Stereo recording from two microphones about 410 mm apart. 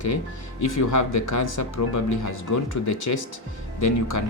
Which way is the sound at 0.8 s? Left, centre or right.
Left.